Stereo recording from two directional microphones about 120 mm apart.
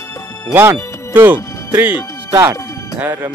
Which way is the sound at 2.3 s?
30° right (ahead or behind).